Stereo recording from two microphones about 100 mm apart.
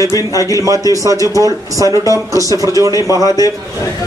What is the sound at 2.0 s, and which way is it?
Speech, 35° left (ahead or behind).